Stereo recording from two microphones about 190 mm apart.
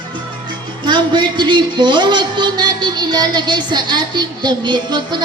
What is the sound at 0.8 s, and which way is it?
Speech, 25° right (ahead or behind).